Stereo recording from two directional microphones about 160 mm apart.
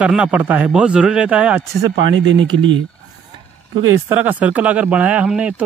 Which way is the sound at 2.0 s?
30° right (ahead or behind).